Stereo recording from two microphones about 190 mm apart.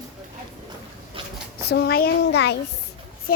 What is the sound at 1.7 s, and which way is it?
Speech, 55° left (ahead or behind).